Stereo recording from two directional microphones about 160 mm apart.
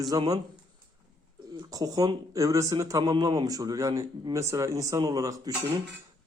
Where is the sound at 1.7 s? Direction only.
20° right (ahead or behind).